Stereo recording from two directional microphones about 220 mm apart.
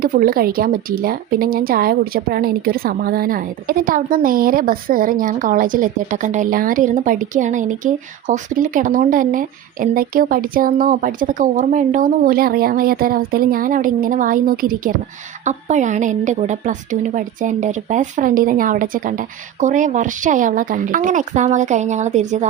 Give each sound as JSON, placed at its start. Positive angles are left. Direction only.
{"t": 0.0, "sound": "speech", "side_deg": -40}